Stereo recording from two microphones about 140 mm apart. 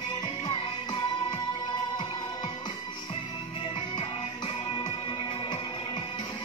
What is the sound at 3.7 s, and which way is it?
Music, 35° left (ahead or behind).